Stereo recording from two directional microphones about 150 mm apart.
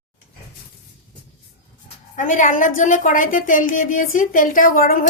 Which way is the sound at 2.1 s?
60° left (ahead or behind).